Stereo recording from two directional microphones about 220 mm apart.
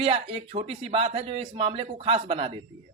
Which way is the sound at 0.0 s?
25° right (ahead or behind).